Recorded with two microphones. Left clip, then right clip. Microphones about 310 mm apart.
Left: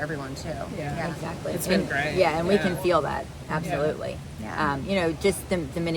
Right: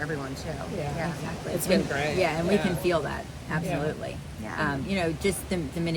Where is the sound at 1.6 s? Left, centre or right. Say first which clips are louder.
Left 1 dB; centre.